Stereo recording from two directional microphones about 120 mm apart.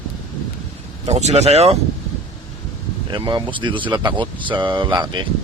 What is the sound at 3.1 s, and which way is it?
Speech, 40° right (ahead or behind).